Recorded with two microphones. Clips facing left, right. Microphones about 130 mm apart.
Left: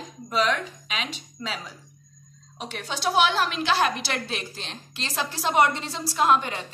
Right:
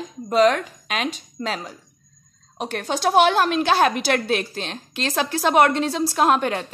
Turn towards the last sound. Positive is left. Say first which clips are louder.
# right 3 dB
turn(degrees=-55)  # may be behind; listen again after turning